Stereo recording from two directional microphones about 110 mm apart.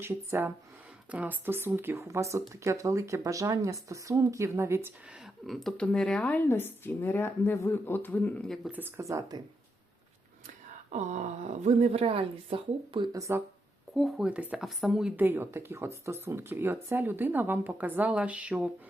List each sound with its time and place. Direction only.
0.0 s speech: 20° right (ahead or behind)
5.2 s speech: centre (ahead or behind); by 8.3 s 15° left (ahead or behind)
8.7 s speech: 20° right (ahead or behind)
9.0 s speech: 30° right (ahead or behind)
10.9 s speech: 90° right; by 13.1 s 55° right (ahead or behind)
13.1 s speech: 25° right (ahead or behind)
13.9 s speech: centre (ahead or behind)
14.3 s speech: 10° right (ahead or behind)
15.1 s speech: 20° right (ahead or behind)